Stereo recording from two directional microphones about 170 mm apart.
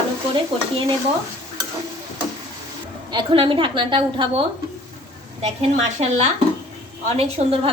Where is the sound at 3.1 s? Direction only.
30° right (ahead or behind).